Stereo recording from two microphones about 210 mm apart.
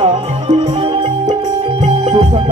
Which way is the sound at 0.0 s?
30° right (ahead or behind).